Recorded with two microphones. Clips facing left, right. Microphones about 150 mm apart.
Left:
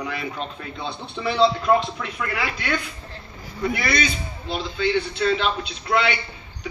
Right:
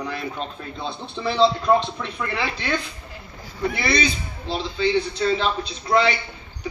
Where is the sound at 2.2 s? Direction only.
30° right (ahead or behind).